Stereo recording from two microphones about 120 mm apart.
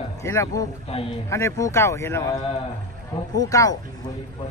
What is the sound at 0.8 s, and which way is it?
Speech, 55° left (ahead or behind).